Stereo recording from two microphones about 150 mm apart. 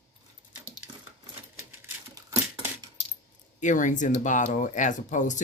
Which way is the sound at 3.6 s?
60° left (ahead or behind).